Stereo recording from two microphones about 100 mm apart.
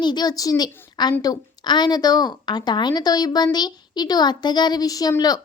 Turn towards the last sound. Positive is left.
turn(degrees=40)  # may be behind; listen again after turning